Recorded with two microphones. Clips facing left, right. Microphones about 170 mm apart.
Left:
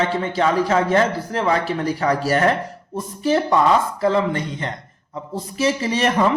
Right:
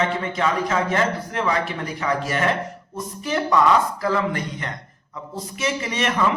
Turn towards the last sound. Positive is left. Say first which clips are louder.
# left 5 dB
turn(degrees=35)  # may be behind; listen again after turning